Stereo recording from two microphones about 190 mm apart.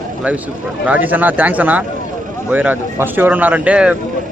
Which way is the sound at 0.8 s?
10° right (ahead or behind).